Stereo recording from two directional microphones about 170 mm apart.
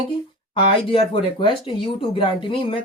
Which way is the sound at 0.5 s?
30° left (ahead or behind).